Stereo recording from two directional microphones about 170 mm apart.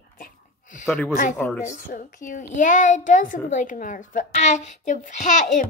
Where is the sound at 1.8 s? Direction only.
50° left (ahead or behind).